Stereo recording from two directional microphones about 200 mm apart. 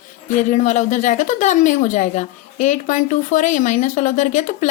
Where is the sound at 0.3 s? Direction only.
35° left (ahead or behind).